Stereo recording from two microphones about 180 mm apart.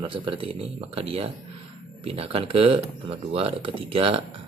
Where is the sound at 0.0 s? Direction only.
30° right (ahead or behind).